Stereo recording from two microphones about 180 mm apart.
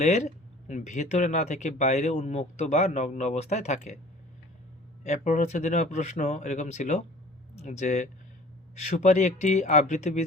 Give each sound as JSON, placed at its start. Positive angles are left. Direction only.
{"t": 0.0, "sound": "speech", "side_deg": 40}
{"t": 5.0, "sound": "speech", "side_deg": 45}